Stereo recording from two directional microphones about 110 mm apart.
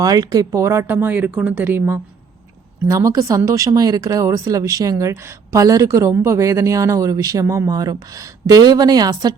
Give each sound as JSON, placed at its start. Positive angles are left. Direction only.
{"t": 0.0, "sound": "speech", "side_deg": -35}
{"t": 2.8, "sound": "speech", "side_deg": -30}